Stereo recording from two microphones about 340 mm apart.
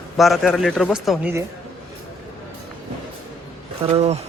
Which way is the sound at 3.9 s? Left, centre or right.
Centre.